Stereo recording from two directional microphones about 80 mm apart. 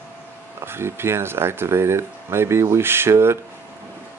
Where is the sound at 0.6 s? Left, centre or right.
Right.